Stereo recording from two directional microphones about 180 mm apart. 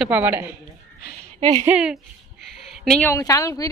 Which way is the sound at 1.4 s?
35° right (ahead or behind).